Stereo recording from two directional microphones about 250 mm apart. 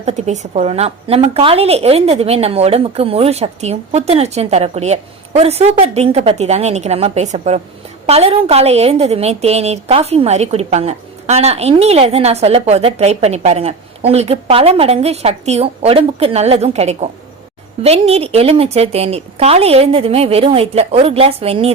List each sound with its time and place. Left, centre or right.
0.0 s a woman's voice: right